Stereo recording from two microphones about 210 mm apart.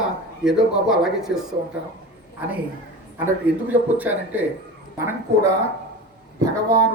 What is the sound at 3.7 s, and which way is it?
Speech, 10° right (ahead or behind).